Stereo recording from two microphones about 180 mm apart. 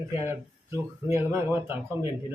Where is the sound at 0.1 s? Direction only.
15° right (ahead or behind).